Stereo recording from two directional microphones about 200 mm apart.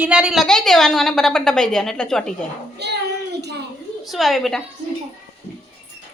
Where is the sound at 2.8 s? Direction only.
55° right (ahead or behind).